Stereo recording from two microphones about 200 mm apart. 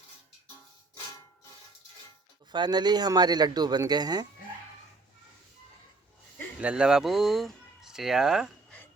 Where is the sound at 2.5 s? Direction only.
20° right (ahead or behind).